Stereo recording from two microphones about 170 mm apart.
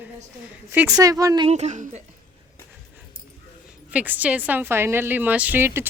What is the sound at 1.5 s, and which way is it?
Speech, 40° right (ahead or behind).